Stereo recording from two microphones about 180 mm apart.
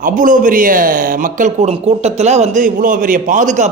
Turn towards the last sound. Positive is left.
turn(degrees=-45)  # may be behind; listen again after turning